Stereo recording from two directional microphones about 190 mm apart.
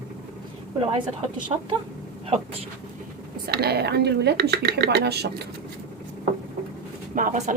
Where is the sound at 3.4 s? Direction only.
55° right (ahead or behind).